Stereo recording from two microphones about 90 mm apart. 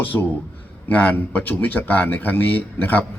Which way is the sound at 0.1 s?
20° left (ahead or behind).